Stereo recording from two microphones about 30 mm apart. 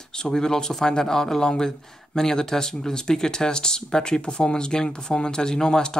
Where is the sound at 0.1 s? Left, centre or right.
Left.